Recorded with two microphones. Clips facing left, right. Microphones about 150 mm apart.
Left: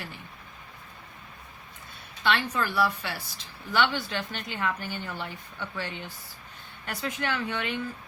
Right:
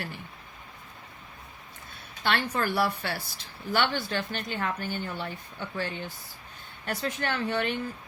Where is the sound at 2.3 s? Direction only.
45° right (ahead or behind).